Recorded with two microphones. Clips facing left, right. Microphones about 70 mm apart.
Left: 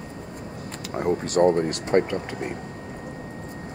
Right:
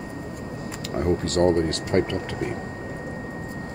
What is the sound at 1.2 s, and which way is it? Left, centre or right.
Speech, centre.